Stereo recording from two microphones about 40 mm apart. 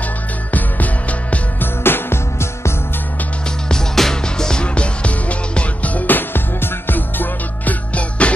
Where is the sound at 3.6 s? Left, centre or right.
Centre.